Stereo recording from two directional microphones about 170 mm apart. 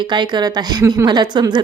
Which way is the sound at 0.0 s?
25° right (ahead or behind).